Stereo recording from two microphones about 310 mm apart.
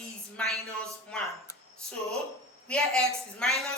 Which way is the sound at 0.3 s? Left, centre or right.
Centre.